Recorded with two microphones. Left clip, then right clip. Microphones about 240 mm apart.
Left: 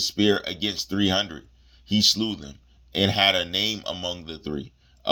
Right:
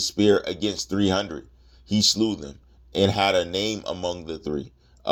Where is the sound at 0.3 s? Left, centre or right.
Left.